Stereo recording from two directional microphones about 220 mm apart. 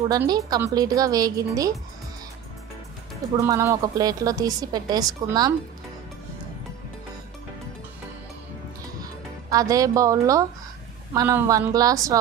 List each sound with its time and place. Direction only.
0.1 s a woman's voice: 15° right (ahead or behind)
3.4 s a woman's voice: 15° right (ahead or behind)
9.0 s a woman's voice: 15° right (ahead or behind)